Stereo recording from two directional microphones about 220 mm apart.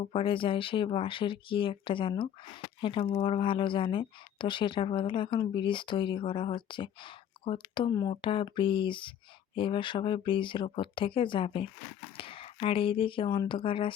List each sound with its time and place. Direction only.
0.0 s speech: 25° left (ahead or behind)